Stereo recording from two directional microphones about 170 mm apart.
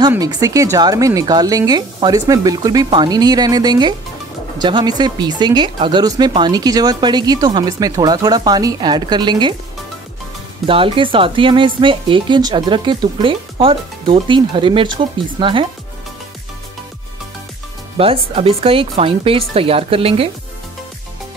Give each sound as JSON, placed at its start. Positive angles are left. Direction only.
{"t": 0.1, "sound": "speech", "side_deg": -20}
{"t": 10.7, "sound": "speech", "side_deg": -30}
{"t": 17.9, "sound": "speech", "side_deg": -35}